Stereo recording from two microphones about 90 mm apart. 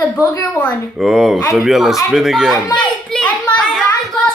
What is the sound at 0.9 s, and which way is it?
A man's voice, 5° right (ahead or behind).